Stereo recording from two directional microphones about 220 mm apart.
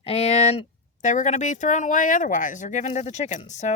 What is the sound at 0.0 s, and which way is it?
A woman's voice, 25° left (ahead or behind).